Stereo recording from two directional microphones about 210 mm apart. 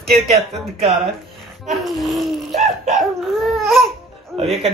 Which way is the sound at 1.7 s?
Centre (ahead or behind).